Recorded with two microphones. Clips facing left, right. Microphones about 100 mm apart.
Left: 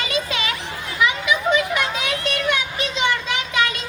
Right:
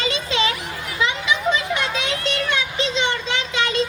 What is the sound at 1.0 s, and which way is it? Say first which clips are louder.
Children playing: left 1 dB; 30° right (ahead or behind).